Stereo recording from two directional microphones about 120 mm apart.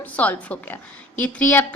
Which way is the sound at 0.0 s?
15° left (ahead or behind).